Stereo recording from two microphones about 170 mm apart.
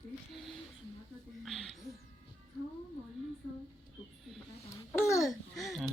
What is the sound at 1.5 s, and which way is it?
Music, centre (ahead or behind).